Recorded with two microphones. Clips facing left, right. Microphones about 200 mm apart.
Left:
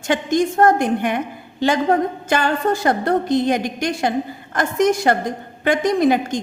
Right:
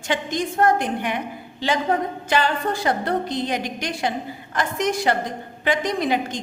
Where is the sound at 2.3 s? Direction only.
45° left (ahead or behind).